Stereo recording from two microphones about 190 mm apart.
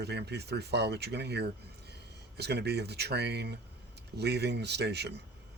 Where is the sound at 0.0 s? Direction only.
60° right (ahead or behind).